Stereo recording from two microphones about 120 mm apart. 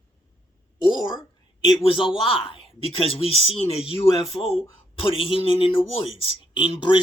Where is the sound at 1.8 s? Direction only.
45° left (ahead or behind).